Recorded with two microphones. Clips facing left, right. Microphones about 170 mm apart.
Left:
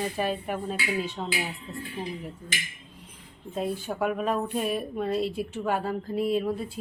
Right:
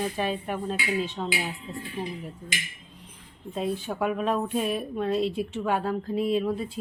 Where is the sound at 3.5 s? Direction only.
Centre (ahead or behind).